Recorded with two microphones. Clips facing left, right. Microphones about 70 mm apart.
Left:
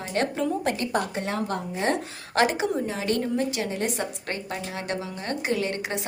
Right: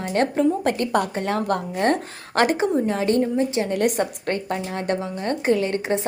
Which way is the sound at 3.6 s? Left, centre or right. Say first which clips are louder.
Right 7 dB; right.